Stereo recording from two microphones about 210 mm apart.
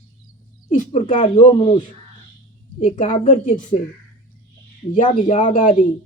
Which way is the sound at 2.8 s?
35° left (ahead or behind).